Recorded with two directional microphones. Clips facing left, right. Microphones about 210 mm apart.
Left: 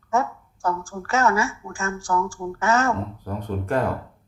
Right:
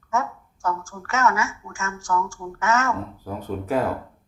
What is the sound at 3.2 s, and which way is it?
Speech, 5° right (ahead or behind).